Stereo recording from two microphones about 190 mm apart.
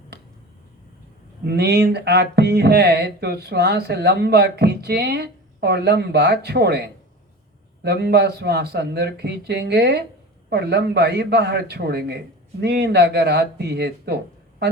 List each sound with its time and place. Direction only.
1.5 s speech: 60° right (ahead or behind)